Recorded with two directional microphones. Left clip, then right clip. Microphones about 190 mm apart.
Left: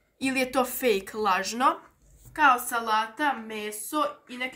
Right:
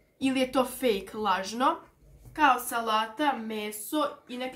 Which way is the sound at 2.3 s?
10° left (ahead or behind).